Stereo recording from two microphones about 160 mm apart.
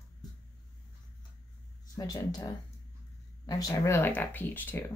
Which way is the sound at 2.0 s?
20° left (ahead or behind).